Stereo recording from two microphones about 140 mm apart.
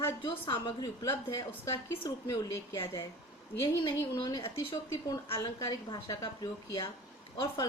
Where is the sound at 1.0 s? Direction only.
20° left (ahead or behind).